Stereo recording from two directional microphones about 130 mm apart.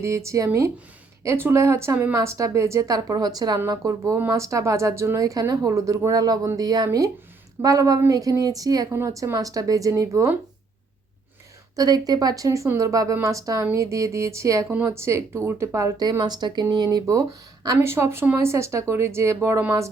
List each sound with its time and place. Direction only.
0.0 s speech: 20° right (ahead or behind)
11.8 s speech: 30° right (ahead or behind)